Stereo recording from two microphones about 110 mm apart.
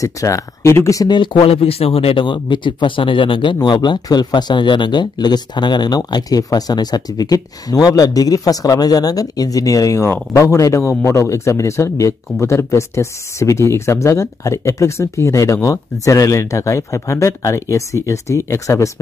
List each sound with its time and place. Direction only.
0.0 s speech: 30° left (ahead or behind)
1.1 s speech: 50° left (ahead or behind); by 18.9 s 25° left (ahead or behind)